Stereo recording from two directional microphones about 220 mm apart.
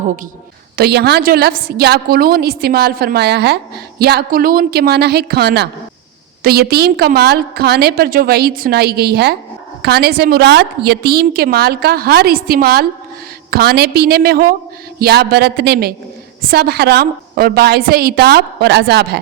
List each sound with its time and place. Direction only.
0.8 s a woman's voice: 45° right (ahead or behind)